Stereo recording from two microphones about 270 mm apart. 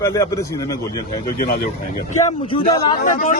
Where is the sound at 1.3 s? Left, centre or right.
Left.